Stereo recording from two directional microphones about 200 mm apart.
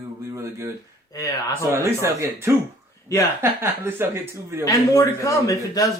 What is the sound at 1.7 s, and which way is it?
Speech, 15° right (ahead or behind).